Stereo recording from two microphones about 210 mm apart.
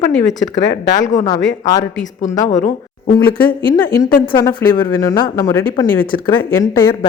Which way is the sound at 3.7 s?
15° left (ahead or behind).